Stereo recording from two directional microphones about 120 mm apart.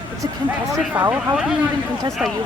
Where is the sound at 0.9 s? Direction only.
15° right (ahead or behind).